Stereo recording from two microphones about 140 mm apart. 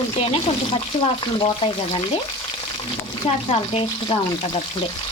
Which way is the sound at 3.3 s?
45° left (ahead or behind).